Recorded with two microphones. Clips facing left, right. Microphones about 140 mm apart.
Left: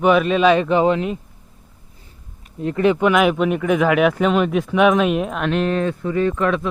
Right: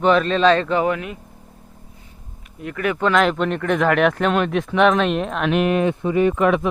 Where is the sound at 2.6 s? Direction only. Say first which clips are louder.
Left 6 dB; 25° left (ahead or behind).